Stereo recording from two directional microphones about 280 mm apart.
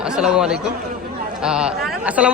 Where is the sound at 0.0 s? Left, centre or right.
Centre.